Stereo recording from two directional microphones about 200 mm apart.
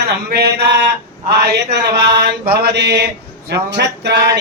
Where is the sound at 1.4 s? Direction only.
55° right (ahead or behind).